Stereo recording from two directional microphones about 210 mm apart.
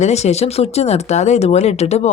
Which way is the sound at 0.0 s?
30° left (ahead or behind).